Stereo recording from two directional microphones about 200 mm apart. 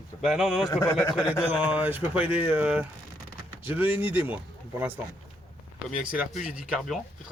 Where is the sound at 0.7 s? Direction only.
20° left (ahead or behind).